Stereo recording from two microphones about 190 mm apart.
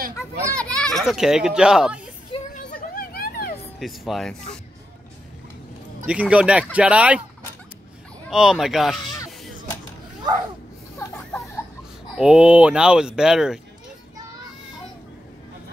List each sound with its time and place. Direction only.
0.6 s a child's voice: 5° left (ahead or behind)
2.3 s a sound: 30° left (ahead or behind)
2.9 s vehicle: 50° left (ahead or behind)
3.8 s speech: centre (ahead or behind)
6.0 s speech: 5° right (ahead or behind)
8.3 s speech: centre (ahead or behind)
12.2 s speech: 5° right (ahead or behind)